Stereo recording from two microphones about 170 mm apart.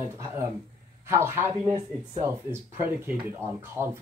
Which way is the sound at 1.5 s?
40° right (ahead or behind).